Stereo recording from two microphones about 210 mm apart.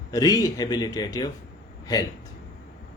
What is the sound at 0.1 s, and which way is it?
Speech, 15° left (ahead or behind).